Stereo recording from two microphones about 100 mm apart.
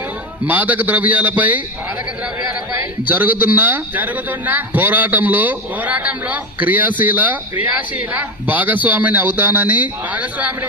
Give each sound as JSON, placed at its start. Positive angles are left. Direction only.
{"t": 0.4, "sound": "a man's voice", "side_deg": -15}
{"t": 3.1, "sound": "a man's voice", "side_deg": -15}